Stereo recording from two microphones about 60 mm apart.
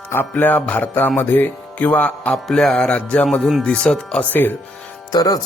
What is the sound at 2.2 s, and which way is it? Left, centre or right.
Music, centre.